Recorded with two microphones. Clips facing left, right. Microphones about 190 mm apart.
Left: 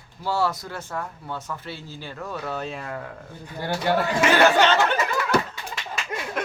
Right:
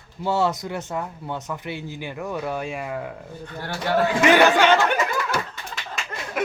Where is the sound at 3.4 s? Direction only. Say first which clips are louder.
Left 4 dB; 10° left (ahead or behind).